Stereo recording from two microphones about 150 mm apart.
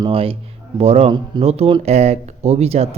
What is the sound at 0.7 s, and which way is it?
Speech, 40° right (ahead or behind).